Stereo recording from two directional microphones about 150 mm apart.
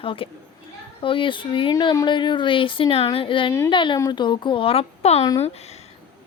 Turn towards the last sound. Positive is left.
turn(degrees=45)  # may be behind; listen again after turning